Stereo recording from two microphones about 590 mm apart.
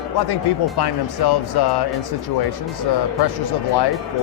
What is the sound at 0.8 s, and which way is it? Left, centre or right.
Speech, left.